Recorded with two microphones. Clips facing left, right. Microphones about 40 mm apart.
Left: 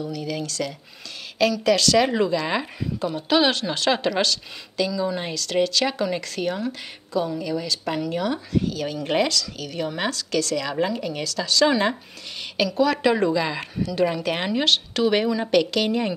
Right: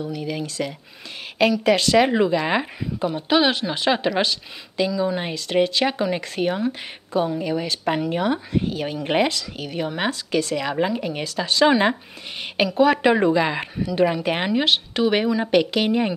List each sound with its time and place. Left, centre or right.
0.0 s a woman's voice: centre